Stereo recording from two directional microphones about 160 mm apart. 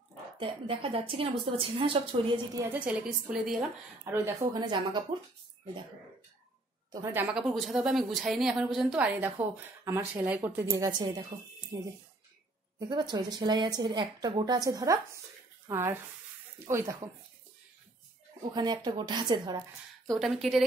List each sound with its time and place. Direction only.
0.4 s a woman's voice: 35° right (ahead or behind)
2.5 s a woman's voice: 10° right (ahead or behind)
4.5 s a woman's voice: 25° right (ahead or behind)
6.9 s a woman's voice: 15° right (ahead or behind)
10.8 s a woman's voice: 25° right (ahead or behind)
18.4 s a woman's voice: 25° right (ahead or behind)
20.2 s a woman's voice: centre (ahead or behind)